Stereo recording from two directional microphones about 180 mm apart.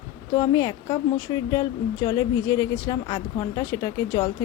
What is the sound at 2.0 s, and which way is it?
A woman's voice, 20° left (ahead or behind).